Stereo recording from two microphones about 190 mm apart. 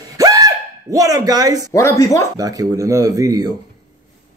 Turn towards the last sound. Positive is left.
turn(degrees=-20)  # may be behind; listen again after turning